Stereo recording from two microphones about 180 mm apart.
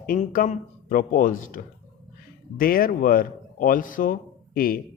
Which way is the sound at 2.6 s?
55° left (ahead or behind).